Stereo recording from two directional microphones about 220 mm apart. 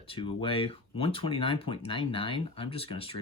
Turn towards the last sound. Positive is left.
turn(degrees=25)  # may be behind; listen again after turning